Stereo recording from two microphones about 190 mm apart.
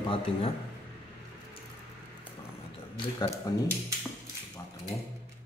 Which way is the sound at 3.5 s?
20° left (ahead or behind).